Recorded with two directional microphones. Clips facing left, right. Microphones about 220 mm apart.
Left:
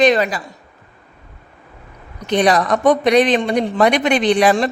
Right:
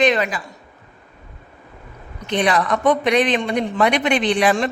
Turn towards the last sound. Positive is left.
turn(degrees=40)  # may be behind; listen again after turning